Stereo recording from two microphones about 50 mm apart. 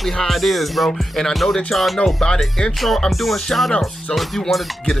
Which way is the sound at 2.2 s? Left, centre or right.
Centre.